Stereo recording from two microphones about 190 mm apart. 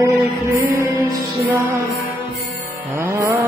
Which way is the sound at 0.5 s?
15° right (ahead or behind).